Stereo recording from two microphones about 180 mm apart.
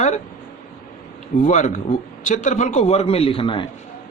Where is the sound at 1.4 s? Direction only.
45° left (ahead or behind).